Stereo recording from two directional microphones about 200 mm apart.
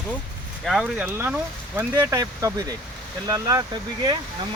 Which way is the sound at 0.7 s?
5° right (ahead or behind).